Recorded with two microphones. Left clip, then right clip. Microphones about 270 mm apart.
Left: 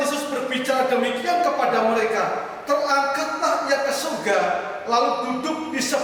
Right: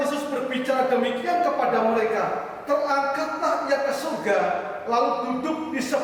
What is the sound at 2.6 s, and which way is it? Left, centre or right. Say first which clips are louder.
A man's voice: left 2 dB; centre.